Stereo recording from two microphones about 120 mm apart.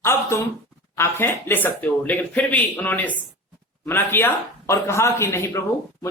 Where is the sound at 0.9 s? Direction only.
20° left (ahead or behind).